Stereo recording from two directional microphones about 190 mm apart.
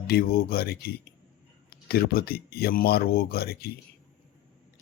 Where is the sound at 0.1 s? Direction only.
55° left (ahead or behind).